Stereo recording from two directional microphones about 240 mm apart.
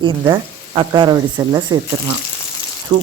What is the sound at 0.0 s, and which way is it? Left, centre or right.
Speech, centre.